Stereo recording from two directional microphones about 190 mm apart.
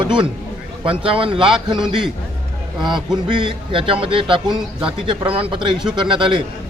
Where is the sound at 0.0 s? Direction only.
25° right (ahead or behind).